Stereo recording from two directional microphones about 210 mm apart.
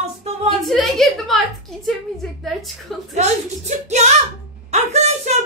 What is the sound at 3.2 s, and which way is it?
Speech, 35° right (ahead or behind).